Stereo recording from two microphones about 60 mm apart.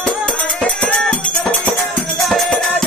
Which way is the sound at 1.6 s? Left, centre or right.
Centre.